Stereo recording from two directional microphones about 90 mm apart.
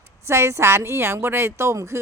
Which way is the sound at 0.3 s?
30° right (ahead or behind).